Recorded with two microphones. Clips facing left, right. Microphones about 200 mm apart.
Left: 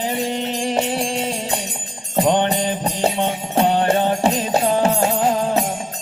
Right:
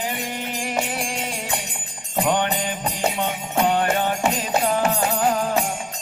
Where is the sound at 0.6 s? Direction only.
25° left (ahead or behind).